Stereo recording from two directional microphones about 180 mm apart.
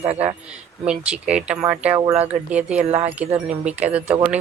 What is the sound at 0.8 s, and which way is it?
Speech, 5° right (ahead or behind).